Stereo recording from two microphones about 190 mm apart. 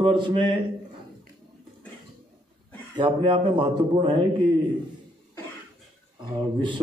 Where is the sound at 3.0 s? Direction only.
25° right (ahead or behind).